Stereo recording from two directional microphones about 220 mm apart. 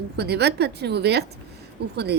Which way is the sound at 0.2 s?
50° right (ahead or behind).